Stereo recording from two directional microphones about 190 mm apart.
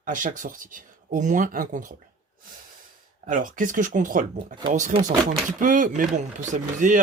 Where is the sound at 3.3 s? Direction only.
45° right (ahead or behind).